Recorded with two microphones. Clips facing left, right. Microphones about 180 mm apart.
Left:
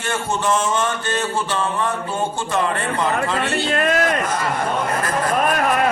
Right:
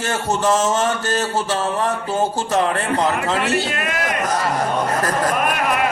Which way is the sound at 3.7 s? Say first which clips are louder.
Left 6 dB; 45° left (ahead or behind).